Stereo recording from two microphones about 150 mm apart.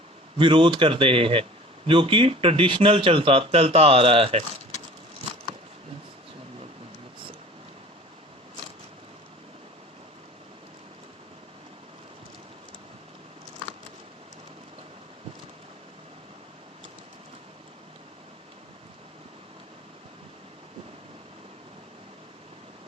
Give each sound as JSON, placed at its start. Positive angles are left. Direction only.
{"t": 0.3, "sound": "speech", "side_deg": -35}